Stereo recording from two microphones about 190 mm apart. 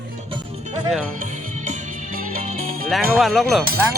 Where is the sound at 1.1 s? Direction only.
40° right (ahead or behind).